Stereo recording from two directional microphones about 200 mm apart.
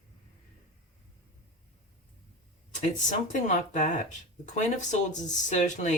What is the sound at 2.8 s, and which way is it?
Speech, 35° left (ahead or behind).